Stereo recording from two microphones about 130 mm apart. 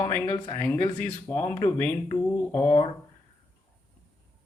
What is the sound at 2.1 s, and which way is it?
Mantra, 20° left (ahead or behind).